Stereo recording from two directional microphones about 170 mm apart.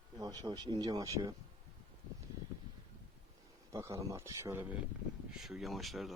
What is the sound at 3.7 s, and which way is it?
Speech, 15° right (ahead or behind).